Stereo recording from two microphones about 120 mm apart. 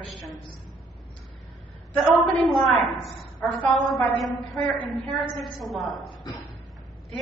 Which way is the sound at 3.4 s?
10° left (ahead or behind).